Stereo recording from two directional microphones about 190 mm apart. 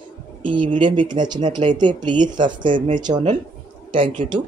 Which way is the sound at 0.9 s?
25° right (ahead or behind).